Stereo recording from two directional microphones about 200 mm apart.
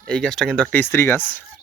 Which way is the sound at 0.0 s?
5° left (ahead or behind).